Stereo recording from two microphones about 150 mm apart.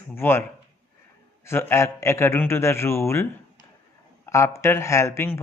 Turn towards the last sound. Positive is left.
turn(degrees=15)  # may be behind; listen again after turning